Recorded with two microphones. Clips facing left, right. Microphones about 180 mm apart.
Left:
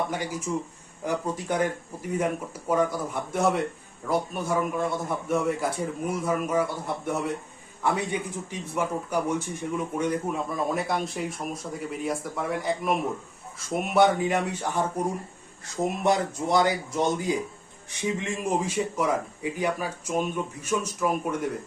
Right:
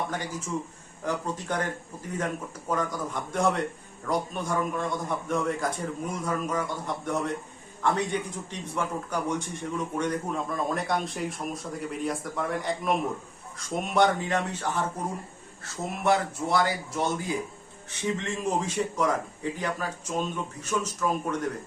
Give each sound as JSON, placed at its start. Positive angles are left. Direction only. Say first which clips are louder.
{"t": 0.1, "sound": "a man's voice", "louder": "left 3 dB", "side_deg": 10}